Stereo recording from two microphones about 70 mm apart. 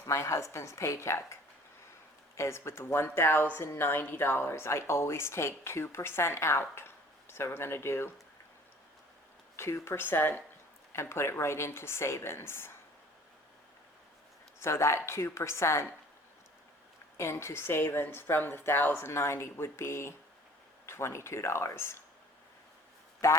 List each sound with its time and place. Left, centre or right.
0.0 s a woman's voice: left
9.6 s speech: left
14.6 s speech: left
17.2 s speech: left
23.2 s a woman's voice: left